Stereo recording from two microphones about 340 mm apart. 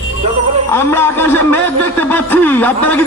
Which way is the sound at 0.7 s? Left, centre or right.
Centre.